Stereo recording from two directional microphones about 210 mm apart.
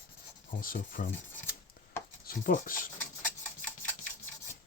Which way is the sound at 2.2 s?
40° left (ahead or behind).